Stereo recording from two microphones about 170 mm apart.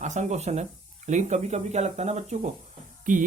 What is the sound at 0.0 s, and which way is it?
Speech, 45° right (ahead or behind).